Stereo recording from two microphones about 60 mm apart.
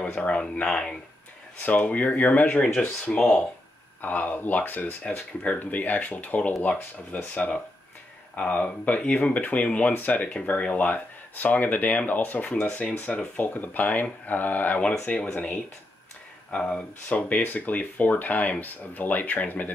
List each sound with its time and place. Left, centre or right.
0.2 s speech: left
1.6 s speech: left
3.2 s speech: centre
4.0 s speech: left
5.0 s speech: centre
5.6 s speech: left
8.4 s speech: left
15.0 s speech: centre